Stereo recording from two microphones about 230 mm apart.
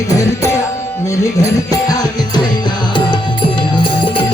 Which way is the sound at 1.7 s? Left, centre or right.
Centre.